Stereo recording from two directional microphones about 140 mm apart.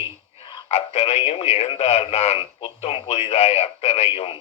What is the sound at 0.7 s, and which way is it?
Speech, 50° left (ahead or behind).